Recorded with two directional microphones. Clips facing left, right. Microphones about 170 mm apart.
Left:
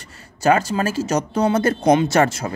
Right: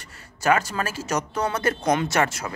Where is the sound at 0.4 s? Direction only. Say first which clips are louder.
Left 5 dB; 30° left (ahead or behind).